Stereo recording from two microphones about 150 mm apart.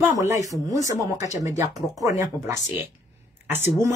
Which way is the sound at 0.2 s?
20° right (ahead or behind).